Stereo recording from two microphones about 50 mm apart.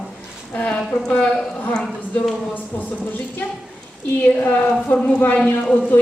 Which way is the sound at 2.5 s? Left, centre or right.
Left.